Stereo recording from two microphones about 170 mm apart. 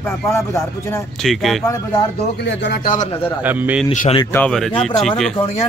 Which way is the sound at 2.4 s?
80° left.